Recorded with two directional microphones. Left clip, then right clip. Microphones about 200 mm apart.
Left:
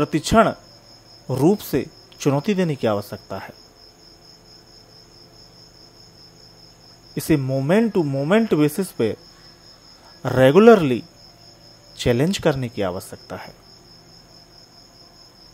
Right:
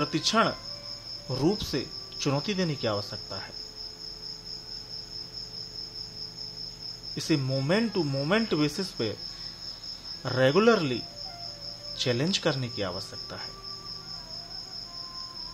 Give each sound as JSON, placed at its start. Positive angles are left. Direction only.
{"t": 0.0, "sound": "speech", "side_deg": 35}
{"t": 7.2, "sound": "speech", "side_deg": 35}
{"t": 10.2, "sound": "speech", "side_deg": 35}